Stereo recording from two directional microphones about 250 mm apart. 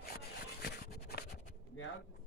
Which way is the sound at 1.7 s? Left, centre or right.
Left.